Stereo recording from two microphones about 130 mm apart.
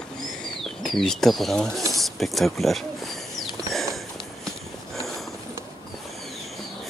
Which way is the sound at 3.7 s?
Centre (ahead or behind).